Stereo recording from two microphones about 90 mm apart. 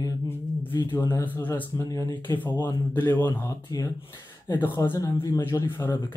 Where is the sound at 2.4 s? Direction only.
20° left (ahead or behind).